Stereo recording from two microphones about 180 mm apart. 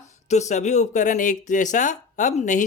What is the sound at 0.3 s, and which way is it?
Speech, 40° left (ahead or behind).